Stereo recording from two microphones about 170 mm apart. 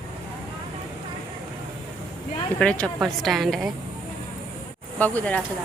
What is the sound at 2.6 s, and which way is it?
Speech, 5° left (ahead or behind).